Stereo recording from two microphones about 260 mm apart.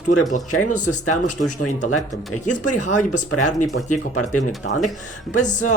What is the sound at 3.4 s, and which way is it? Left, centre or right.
Speech, left.